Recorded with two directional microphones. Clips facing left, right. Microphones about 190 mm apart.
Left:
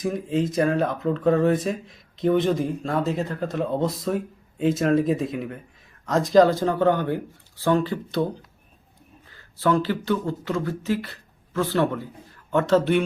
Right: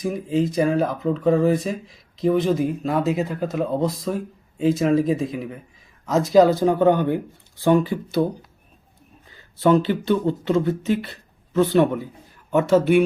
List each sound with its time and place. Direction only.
0.0 s speech: centre (ahead or behind)
9.3 s speech: 20° right (ahead or behind)